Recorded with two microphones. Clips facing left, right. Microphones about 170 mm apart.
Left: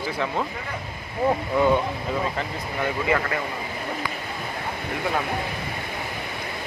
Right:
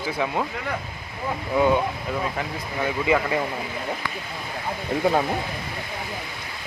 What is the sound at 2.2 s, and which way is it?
Speech, 5° right (ahead or behind).